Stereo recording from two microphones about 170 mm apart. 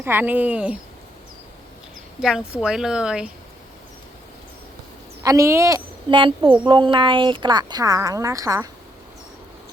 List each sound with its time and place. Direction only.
0.0 s speech: 10° right (ahead or behind)
2.5 s speech: centre (ahead or behind)
5.2 s speech: 20° right (ahead or behind)